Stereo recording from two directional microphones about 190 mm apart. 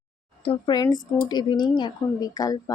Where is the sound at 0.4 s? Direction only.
25° left (ahead or behind).